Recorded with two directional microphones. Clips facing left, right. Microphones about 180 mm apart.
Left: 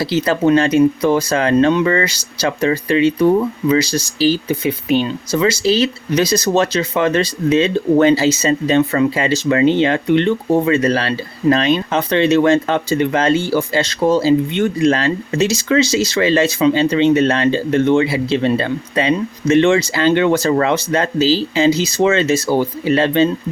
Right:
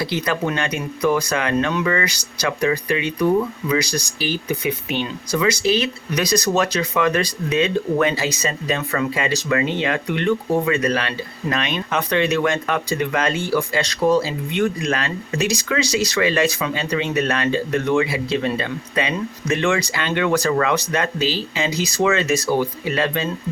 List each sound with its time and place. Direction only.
0.0 s speech: 30° left (ahead or behind)